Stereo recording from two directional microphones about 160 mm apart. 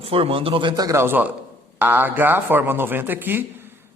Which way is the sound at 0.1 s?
35° right (ahead or behind).